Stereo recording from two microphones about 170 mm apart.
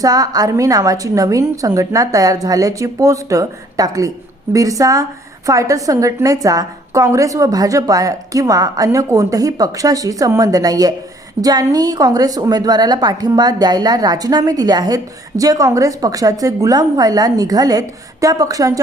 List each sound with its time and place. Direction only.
0.0 s a woman's voice: 20° right (ahead or behind)